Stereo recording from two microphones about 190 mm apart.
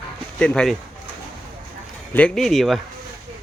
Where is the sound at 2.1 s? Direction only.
5° left (ahead or behind).